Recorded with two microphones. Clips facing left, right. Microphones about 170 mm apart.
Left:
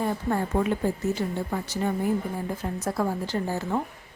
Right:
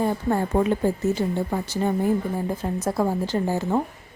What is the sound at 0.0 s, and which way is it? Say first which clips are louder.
A woman's voice: right 4 dB; 30° right (ahead or behind).